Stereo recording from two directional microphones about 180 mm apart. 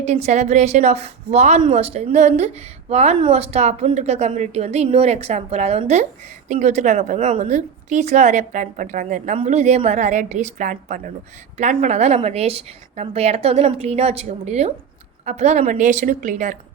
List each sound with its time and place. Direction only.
0.0 s a woman's voice: 40° right (ahead or behind)